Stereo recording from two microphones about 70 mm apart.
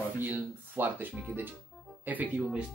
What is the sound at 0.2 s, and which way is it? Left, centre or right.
Speech, right.